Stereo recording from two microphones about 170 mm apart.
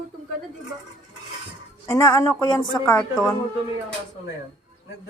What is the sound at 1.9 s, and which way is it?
Speech, 15° left (ahead or behind).